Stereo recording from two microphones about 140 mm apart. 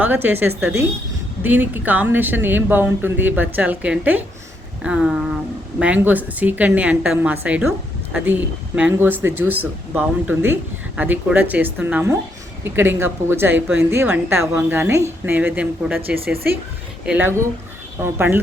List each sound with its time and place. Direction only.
0.0 s speech: 15° right (ahead or behind)
17.1 s speech: 15° right (ahead or behind)